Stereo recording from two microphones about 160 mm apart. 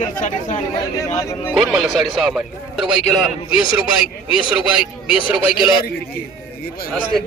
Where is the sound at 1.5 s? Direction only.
Centre (ahead or behind).